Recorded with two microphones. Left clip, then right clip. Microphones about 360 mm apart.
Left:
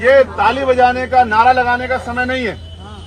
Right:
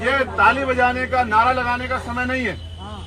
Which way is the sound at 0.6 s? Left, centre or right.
Left.